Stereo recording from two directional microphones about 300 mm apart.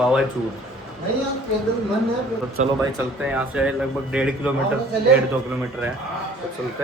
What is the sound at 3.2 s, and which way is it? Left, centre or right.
Speech, centre.